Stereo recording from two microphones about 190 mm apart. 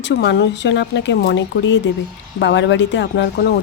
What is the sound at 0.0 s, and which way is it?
Speech, 65° left (ahead or behind).